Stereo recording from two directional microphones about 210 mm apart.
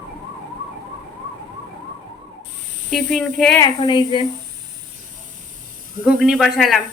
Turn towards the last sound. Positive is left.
turn(degrees=0)  # may be behind; listen again after turning